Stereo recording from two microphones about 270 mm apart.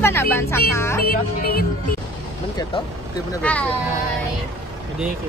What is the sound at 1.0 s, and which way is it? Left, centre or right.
Speech, left.